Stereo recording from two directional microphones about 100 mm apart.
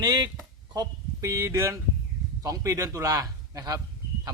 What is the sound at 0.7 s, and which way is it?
A man's voice, 35° right (ahead or behind).